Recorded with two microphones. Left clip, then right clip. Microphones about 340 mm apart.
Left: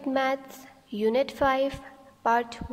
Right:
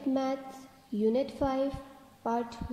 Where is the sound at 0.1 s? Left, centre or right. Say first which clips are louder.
Left 6 dB; left.